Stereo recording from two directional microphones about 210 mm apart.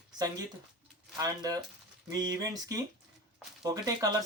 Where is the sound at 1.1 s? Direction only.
15° right (ahead or behind).